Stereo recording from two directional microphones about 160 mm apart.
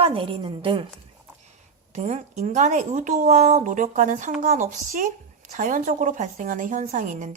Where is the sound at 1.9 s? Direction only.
45° right (ahead or behind).